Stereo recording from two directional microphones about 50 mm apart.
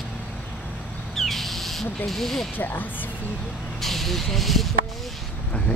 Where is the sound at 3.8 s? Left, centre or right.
Centre.